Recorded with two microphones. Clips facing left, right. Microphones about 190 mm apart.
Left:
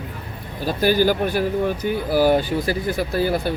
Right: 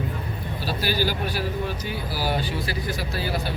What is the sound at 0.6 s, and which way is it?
Speech, 50° left (ahead or behind).